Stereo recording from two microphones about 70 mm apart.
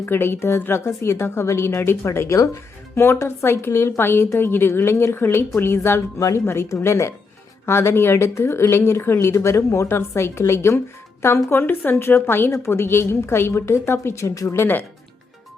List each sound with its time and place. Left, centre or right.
0.0 s a woman's voice: left
2.9 s a woman's voice: left
11.5 s a woman's voice: left